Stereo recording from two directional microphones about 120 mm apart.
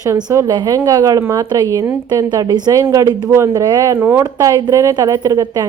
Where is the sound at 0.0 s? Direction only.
25° right (ahead or behind).